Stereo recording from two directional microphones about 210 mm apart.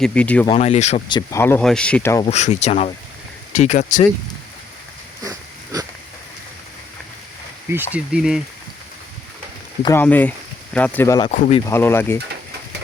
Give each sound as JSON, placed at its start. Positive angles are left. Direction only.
{"t": 0.0, "sound": "speech", "side_deg": 5}
{"t": 0.4, "sound": "speech", "side_deg": 30}
{"t": 2.2, "sound": "speech", "side_deg": 30}
{"t": 5.2, "sound": "a sound", "side_deg": -15}
{"t": 7.9, "sound": "speech", "side_deg": -5}
{"t": 9.8, "sound": "speech", "side_deg": 10}
{"t": 11.3, "sound": "speech", "side_deg": 30}
{"t": 11.6, "sound": "speech", "side_deg": 10}